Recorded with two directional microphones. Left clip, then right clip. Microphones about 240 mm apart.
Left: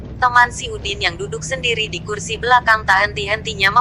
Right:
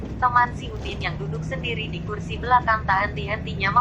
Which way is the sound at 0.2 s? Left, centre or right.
Left.